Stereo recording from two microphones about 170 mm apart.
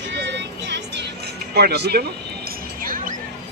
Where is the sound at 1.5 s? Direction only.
70° right (ahead or behind).